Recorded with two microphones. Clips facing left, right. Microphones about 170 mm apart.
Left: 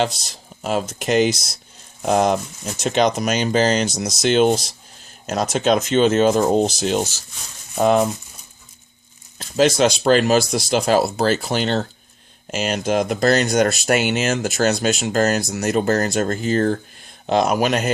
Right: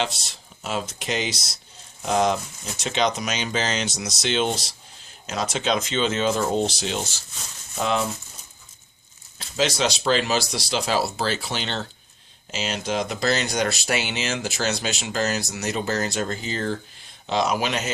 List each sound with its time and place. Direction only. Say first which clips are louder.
0.0 s speech: left 6 dB; 45° left (ahead or behind)
9.6 s speech: left 7 dB; 50° left (ahead or behind)